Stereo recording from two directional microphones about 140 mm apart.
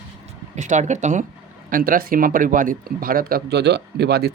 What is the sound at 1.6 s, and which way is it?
Speech, 85° right.